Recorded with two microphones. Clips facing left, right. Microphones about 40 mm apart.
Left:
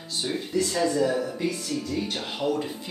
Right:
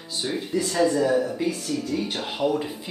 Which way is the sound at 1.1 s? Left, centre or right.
Centre.